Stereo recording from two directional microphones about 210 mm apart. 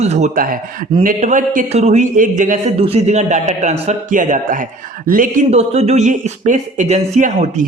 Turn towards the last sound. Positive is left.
turn(degrees=-35)  # may be behind; listen again after turning